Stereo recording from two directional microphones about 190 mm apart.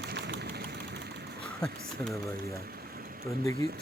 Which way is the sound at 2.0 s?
Centre (ahead or behind).